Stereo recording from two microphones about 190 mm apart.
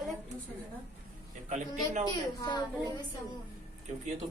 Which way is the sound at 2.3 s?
20° left (ahead or behind).